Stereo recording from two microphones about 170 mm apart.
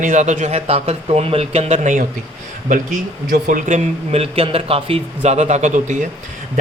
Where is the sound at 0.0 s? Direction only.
45° right (ahead or behind).